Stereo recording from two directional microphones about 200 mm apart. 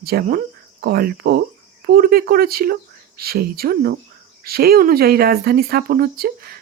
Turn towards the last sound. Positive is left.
turn(degrees=-50)  # may be behind; listen again after turning